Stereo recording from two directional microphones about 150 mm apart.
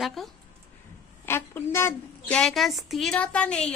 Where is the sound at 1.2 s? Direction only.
15° left (ahead or behind).